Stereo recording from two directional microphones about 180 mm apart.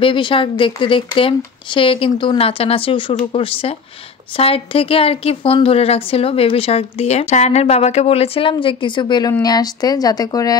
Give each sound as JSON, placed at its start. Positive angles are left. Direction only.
{"t": 0.0, "sound": "a woman's voice", "side_deg": 30}